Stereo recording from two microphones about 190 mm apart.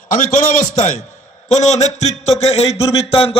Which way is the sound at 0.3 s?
40° left (ahead or behind).